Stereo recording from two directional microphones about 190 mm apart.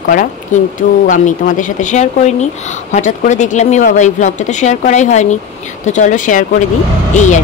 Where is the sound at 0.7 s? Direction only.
40° left (ahead or behind).